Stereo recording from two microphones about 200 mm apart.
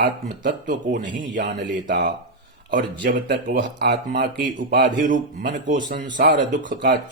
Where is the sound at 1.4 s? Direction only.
60° right (ahead or behind).